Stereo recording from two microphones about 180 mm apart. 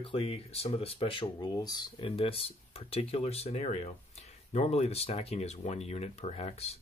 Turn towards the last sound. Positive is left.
turn(degrees=35)  # may be behind; listen again after turning